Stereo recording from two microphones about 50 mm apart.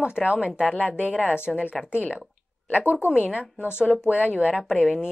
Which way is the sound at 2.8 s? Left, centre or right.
Right.